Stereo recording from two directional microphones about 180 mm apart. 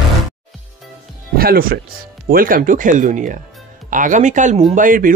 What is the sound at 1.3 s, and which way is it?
Speech, 55° right (ahead or behind).